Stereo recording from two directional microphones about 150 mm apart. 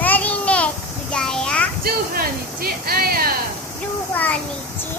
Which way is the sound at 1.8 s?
85° right.